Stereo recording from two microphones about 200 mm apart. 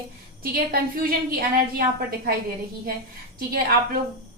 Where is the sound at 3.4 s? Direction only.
45° right (ahead or behind).